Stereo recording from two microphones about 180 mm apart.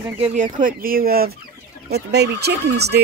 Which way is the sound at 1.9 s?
65° right (ahead or behind).